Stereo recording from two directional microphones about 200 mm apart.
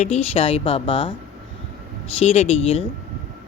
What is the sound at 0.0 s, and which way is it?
Speech, 30° left (ahead or behind).